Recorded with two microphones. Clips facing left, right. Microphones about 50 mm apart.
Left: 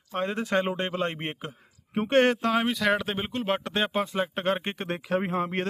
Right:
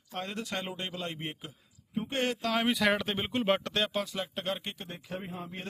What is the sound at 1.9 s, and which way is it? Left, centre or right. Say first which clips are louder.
Speech: left 10 dB; left.